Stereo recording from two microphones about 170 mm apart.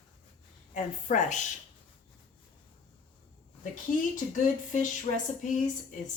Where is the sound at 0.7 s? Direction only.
45° left (ahead or behind).